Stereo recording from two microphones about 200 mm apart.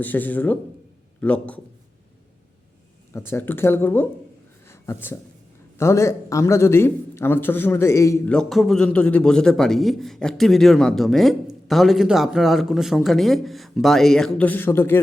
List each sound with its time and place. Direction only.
0.0 s speech: 10° left (ahead or behind)
3.1 s speech: 10° left (ahead or behind)
4.7 s a sound: 10° left (ahead or behind)
5.7 s a man's voice: 15° left (ahead or behind)